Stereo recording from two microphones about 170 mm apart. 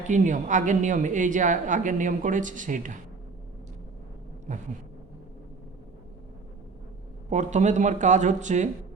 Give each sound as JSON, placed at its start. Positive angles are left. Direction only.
{"t": 0.1, "sound": "speech", "side_deg": -45}
{"t": 4.5, "sound": "speech", "side_deg": -45}
{"t": 7.3, "sound": "speech", "side_deg": -45}